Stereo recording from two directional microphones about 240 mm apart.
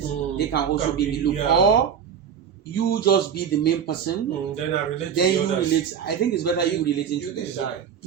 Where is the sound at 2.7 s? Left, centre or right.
Left.